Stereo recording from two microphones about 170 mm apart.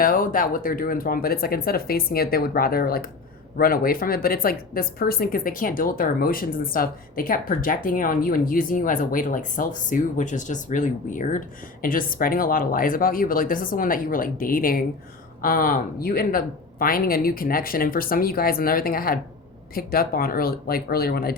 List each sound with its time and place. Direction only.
0.0 s speech: 55° left (ahead or behind)